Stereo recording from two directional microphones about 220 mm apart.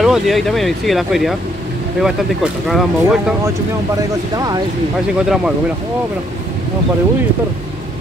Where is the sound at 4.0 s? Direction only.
15° right (ahead or behind).